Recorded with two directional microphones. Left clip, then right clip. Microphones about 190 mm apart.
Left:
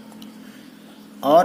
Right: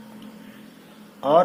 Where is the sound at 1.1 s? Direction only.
55° left (ahead or behind).